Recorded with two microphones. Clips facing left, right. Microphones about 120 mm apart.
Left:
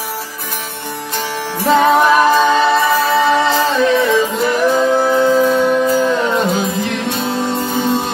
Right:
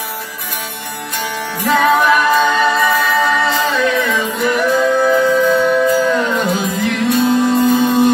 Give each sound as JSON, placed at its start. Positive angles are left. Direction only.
{"t": 1.6, "sound": "music", "side_deg": 30}